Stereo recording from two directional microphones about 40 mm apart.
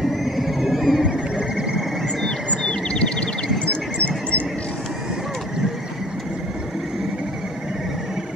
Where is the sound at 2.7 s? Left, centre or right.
Left.